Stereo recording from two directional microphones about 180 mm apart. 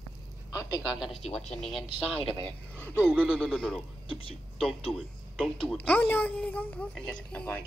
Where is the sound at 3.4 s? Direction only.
5° left (ahead or behind).